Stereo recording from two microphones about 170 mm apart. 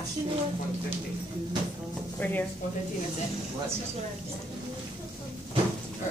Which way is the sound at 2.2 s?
10° left (ahead or behind).